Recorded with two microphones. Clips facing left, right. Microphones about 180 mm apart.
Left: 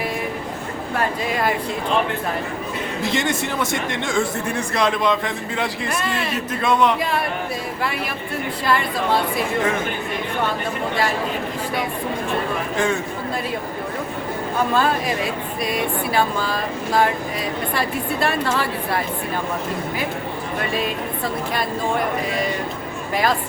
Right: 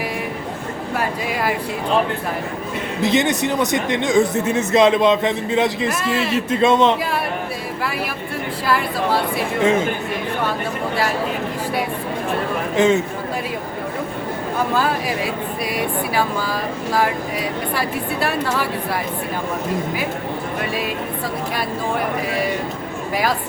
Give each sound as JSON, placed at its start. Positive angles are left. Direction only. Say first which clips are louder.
{"t": 0.9, "sound": "speech", "louder": "left 1 dB", "side_deg": -10}
{"t": 3.0, "sound": "a man's voice", "louder": "right 6 dB", "side_deg": -20}
{"t": 5.9, "sound": "a woman's voice", "louder": "right 3 dB", "side_deg": -5}
{"t": 6.3, "sound": "a man's voice", "louder": "right 6 dB", "side_deg": -25}
{"t": 8.6, "sound": "a woman's voice", "louder": "right 1 dB", "side_deg": -5}
{"t": 12.7, "sound": "a man's voice", "louder": "right 7 dB", "side_deg": -20}
{"t": 14.7, "sound": "speech", "louder": "left 1 dB", "side_deg": -5}
{"t": 20.6, "sound": "speech", "louder": "left 3 dB", "side_deg": -10}